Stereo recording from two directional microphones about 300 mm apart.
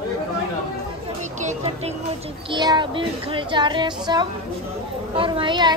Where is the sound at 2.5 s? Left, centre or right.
Centre.